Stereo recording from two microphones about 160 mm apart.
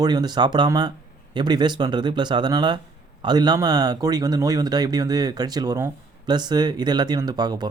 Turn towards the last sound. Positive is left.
turn(degrees=-25)  # may be behind; listen again after turning